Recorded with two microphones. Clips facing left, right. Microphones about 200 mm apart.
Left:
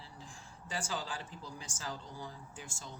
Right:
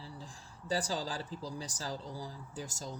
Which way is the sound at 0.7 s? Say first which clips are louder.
Right 5 dB; 35° right (ahead or behind).